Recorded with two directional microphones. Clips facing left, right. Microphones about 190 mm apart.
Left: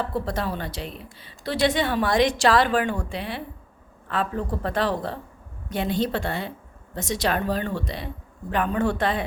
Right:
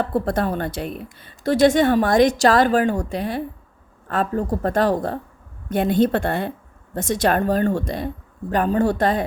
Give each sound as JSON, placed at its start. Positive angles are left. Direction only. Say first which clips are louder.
{"t": 0.0, "sound": "a woman's voice", "louder": "right 6 dB", "side_deg": -55}